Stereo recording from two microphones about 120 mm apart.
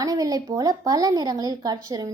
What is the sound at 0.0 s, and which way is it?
A woman's voice, 30° right (ahead or behind).